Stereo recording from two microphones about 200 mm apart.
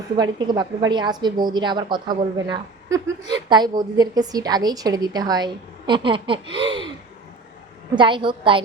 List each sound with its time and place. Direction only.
0.2 s a woman's voice: 20° right (ahead or behind)
7.9 s a woman's voice: 25° right (ahead or behind)